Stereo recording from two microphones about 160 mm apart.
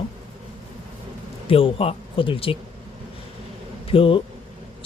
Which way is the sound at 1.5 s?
35° left (ahead or behind).